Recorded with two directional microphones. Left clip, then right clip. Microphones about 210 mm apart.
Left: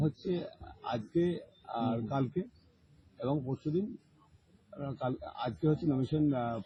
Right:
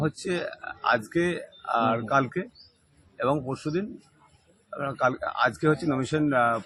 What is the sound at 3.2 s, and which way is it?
Speech, 30° right (ahead or behind).